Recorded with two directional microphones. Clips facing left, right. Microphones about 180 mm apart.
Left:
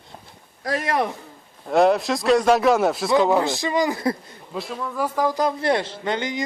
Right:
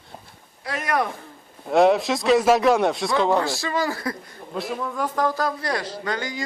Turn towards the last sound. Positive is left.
turn(degrees=20)  # may be behind; listen again after turning